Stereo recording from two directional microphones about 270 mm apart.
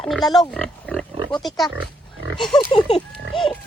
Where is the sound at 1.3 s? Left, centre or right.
Centre.